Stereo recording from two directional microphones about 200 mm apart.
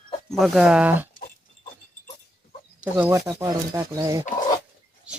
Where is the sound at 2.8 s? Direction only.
15° right (ahead or behind).